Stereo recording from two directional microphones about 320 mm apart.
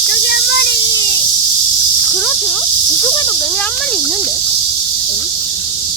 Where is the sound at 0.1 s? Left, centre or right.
Left.